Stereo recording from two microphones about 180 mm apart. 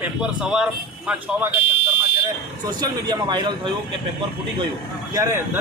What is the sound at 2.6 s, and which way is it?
Speech, 20° right (ahead or behind).